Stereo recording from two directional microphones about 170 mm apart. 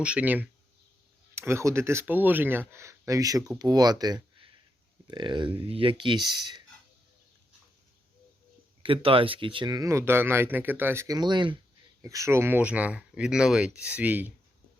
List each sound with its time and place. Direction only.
0.0 s speech: 5° right (ahead or behind); by 6.6 s 25° right (ahead or behind)
8.8 s speech: 30° right (ahead or behind); by 14.3 s 10° right (ahead or behind)